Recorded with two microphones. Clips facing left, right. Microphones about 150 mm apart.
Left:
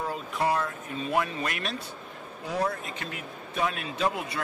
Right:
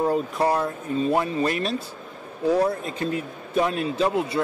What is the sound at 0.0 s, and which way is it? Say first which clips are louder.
A man's voice: right 7 dB; 40° right (ahead or behind).